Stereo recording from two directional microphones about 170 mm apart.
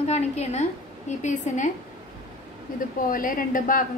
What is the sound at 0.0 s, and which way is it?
A woman's voice, 40° left (ahead or behind).